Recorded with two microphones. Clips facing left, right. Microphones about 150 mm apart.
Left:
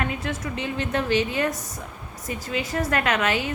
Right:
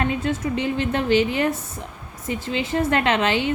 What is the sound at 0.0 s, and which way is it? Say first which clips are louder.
A woman's voice: right 5 dB; 25° right (ahead or behind).